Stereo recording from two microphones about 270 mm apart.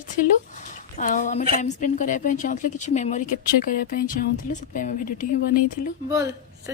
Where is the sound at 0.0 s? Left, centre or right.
Left.